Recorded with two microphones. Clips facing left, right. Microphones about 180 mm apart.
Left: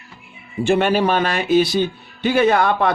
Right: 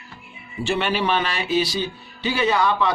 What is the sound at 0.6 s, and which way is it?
Speech, 45° left (ahead or behind).